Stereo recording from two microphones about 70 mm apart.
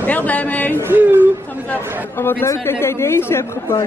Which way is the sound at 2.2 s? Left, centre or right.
Left.